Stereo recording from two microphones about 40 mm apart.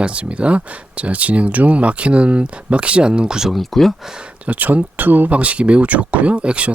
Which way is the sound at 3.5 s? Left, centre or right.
Centre.